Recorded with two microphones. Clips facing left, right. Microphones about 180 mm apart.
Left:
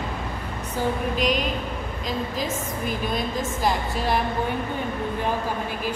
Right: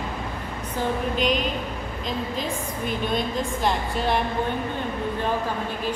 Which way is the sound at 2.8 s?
5° left (ahead or behind).